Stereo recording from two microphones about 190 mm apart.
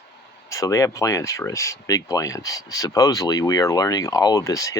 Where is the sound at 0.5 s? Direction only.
15° left (ahead or behind).